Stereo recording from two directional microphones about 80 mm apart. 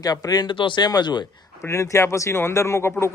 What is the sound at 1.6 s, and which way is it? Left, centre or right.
A man's voice, left.